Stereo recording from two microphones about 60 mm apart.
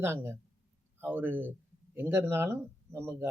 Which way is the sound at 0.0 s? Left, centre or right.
Right.